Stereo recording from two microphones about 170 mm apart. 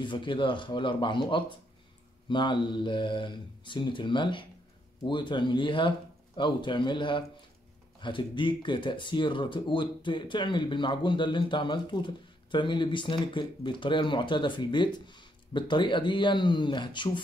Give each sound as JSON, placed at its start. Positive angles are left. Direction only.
{"t": 0.0, "sound": "speech", "side_deg": 30}